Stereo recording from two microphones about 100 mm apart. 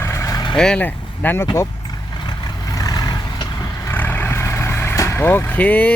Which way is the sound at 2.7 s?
35° left (ahead or behind).